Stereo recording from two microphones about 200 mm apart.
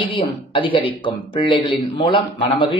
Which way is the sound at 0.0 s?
25° left (ahead or behind).